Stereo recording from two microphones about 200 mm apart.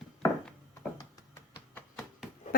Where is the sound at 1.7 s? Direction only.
10° left (ahead or behind).